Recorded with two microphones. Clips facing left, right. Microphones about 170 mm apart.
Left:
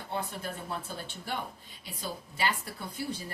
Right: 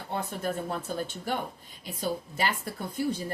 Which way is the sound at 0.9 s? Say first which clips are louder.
Right 6 dB; 45° right (ahead or behind).